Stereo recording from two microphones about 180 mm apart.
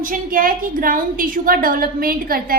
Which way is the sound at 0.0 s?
50° right (ahead or behind).